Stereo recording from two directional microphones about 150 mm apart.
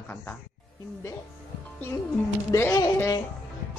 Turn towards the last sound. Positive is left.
turn(degrees=20)  # may be behind; listen again after turning